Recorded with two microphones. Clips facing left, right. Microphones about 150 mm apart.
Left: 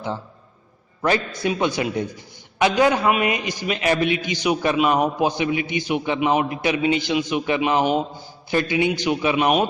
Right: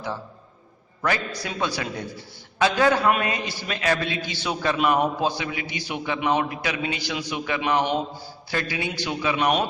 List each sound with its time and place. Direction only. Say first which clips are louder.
1.0 s a man's voice: left 5 dB; 25° left (ahead or behind)